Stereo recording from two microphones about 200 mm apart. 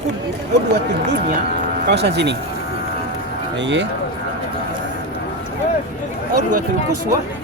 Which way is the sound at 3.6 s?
65° right (ahead or behind).